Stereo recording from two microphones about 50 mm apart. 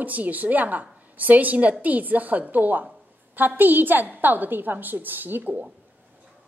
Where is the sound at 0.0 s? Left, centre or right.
Right.